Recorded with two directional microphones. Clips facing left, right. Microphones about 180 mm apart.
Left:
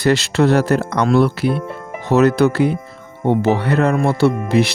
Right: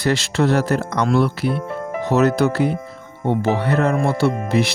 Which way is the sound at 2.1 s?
90° left.